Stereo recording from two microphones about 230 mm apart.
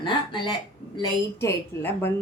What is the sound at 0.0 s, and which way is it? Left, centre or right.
A woman's voice, left.